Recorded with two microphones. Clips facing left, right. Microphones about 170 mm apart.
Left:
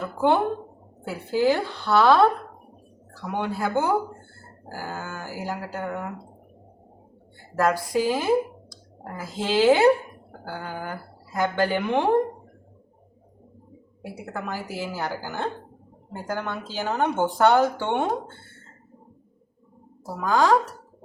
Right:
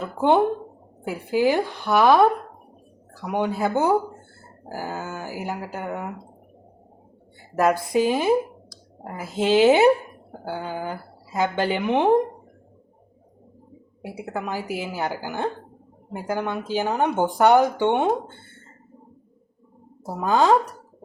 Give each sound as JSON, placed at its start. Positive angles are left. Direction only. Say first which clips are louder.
{"t": 0.0, "sound": "speech", "louder": "right 3 dB", "side_deg": -20}
{"t": 7.5, "sound": "speech", "louder": "right 2 dB", "side_deg": -20}
{"t": 14.3, "sound": "speech", "louder": "right 3 dB", "side_deg": -15}
{"t": 20.1, "sound": "speech", "louder": "right 2 dB", "side_deg": -20}